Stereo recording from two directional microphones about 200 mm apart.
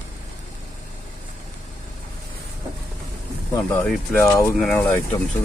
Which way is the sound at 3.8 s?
10° left (ahead or behind).